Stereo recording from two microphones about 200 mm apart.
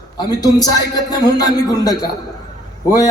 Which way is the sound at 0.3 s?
20° left (ahead or behind).